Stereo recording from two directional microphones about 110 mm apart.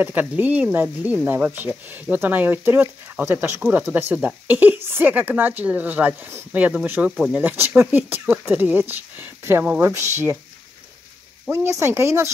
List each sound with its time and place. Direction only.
0.0 s speech: 15° right (ahead or behind)
7.1 s speech: centre (ahead or behind)
7.3 s speech: 15° right (ahead or behind)
11.5 s speech: 25° right (ahead or behind)